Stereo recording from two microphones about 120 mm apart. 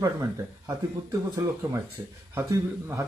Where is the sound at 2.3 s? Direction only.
25° right (ahead or behind).